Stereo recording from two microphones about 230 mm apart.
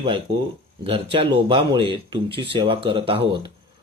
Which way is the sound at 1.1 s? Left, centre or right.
Right.